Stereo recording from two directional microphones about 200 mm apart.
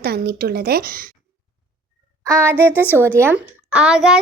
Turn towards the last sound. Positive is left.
turn(degrees=-5)  # may be behind; listen again after turning